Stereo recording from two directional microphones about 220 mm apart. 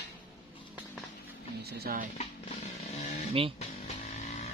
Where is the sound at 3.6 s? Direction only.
30° left (ahead or behind).